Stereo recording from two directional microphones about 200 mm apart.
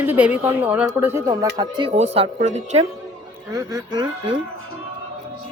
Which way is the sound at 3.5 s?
20° right (ahead or behind).